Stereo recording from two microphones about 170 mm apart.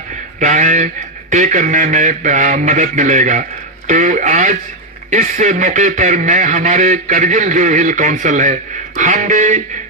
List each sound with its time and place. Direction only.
0.3 s speech: 45° right (ahead or behind)